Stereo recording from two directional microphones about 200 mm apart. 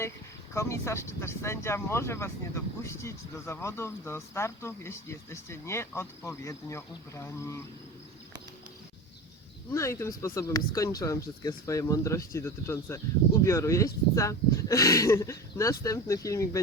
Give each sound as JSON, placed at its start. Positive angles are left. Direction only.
{"t": 0.5, "sound": "speech", "side_deg": 15}
{"t": 9.7, "sound": "speech", "side_deg": 15}